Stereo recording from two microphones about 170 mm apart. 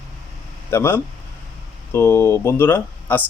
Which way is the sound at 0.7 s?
15° left (ahead or behind).